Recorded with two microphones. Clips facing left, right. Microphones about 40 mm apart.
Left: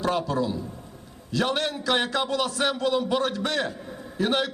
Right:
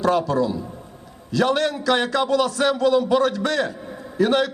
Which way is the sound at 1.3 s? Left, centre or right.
Left.